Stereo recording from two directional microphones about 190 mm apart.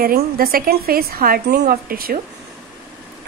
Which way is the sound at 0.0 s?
50° right (ahead or behind).